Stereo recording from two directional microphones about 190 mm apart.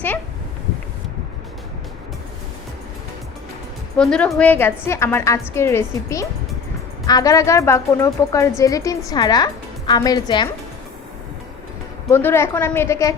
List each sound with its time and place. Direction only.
3.9 s a woman's voice: 5° left (ahead or behind); by 10.5 s 20° left (ahead or behind)
12.1 s a woman's voice: 10° left (ahead or behind)